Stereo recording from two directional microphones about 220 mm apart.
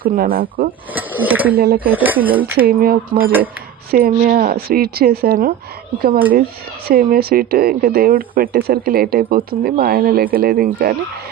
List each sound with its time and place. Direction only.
0.0 s cutlery: 40° right (ahead or behind)
0.9 s speech: 10° right (ahead or behind)
1.5 s speech: 45° right (ahead or behind)
1.8 s speech: 10° right (ahead or behind)
2.6 s cutlery: 40° right (ahead or behind)
3.9 s speech: 40° right (ahead or behind)
6.0 s cutlery: 40° right (ahead or behind)
6.8 s speech: 40° right (ahead or behind)